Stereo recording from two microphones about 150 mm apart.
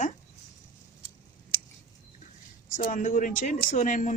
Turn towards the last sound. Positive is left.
turn(degrees=55)  # may be behind; listen again after turning